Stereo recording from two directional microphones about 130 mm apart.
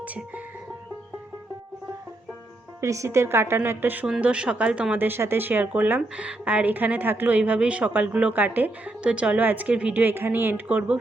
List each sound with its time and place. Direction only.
0.0 s music: 10° right (ahead or behind)
2.8 s a woman's voice: 25° right (ahead or behind)